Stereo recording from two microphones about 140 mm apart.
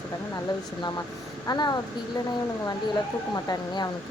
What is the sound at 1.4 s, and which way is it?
Speech, 30° left (ahead or behind).